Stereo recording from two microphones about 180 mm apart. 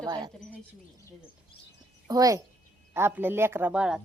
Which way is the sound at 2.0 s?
20° right (ahead or behind).